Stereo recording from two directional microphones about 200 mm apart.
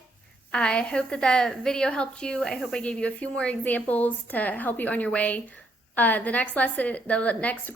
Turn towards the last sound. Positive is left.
turn(degrees=5)  # may be behind; listen again after turning